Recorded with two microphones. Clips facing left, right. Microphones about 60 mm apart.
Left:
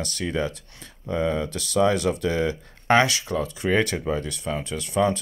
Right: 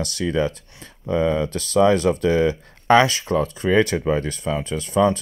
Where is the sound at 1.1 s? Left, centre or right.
Right.